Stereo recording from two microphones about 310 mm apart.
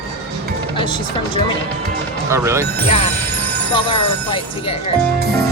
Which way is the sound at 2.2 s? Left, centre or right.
Centre.